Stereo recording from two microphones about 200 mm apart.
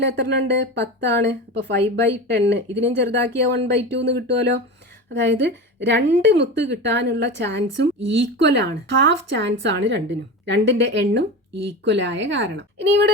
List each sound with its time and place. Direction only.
0.0 s speech: 60° right (ahead or behind)